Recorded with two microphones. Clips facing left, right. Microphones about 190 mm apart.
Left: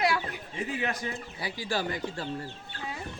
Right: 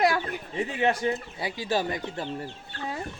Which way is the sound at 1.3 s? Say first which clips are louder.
Right 4 dB; 25° right (ahead or behind).